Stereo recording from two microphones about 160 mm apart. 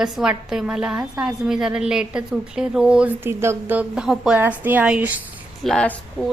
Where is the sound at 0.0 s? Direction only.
5° right (ahead or behind).